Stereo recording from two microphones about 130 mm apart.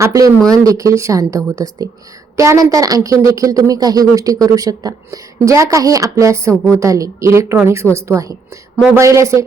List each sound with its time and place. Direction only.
0.0 s speech: 25° right (ahead or behind)